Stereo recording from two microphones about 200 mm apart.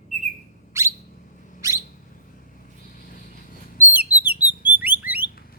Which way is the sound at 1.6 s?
15° right (ahead or behind).